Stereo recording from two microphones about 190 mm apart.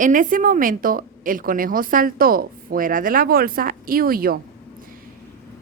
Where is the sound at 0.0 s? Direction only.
45° right (ahead or behind).